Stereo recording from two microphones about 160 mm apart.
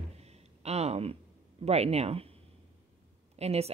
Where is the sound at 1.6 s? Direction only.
40° right (ahead or behind).